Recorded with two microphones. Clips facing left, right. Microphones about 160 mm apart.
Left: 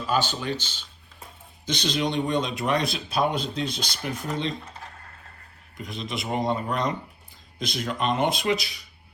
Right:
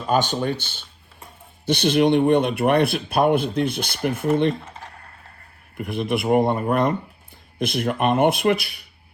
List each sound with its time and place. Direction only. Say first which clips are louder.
0.1 s speech: right 6 dB; 50° right (ahead or behind)
1.6 s speech: right 9 dB; 60° right (ahead or behind)
5.7 s speech: right 9 dB; 60° right (ahead or behind)